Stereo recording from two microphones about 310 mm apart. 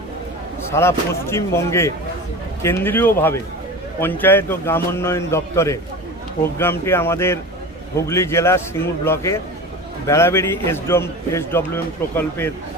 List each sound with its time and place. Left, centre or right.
0.7 s a man's voice: centre